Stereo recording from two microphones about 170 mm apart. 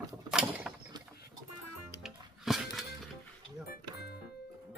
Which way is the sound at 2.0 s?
Centre (ahead or behind).